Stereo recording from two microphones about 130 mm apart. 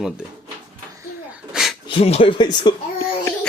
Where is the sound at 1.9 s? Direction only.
50° left (ahead or behind).